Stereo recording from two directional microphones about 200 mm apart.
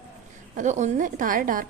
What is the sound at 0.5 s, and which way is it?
A woman's voice, 35° right (ahead or behind).